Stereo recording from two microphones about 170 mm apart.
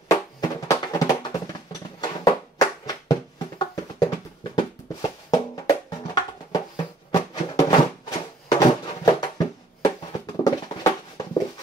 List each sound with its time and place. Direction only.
0.1 s music: 20° left (ahead or behind)
1.7 s a sound: 20° left (ahead or behind)
4.6 s music: 25° left (ahead or behind)